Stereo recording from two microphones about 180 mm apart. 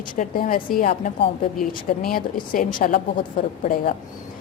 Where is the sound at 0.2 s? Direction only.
50° left (ahead or behind).